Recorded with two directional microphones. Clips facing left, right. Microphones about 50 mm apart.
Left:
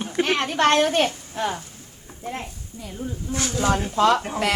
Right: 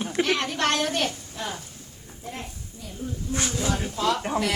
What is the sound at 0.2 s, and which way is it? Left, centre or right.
A woman's voice, left.